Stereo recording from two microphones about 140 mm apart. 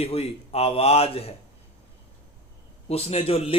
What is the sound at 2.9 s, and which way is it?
Speech, 45° left (ahead or behind).